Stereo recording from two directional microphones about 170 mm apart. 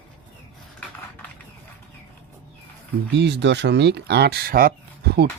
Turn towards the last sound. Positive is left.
turn(degrees=-65)  # may be behind; listen again after turning